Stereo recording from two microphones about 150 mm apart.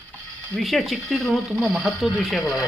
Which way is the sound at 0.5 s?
Centre (ahead or behind).